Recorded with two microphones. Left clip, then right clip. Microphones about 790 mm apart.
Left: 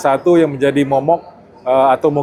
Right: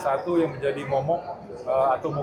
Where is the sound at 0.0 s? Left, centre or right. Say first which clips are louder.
Left 11 dB; left.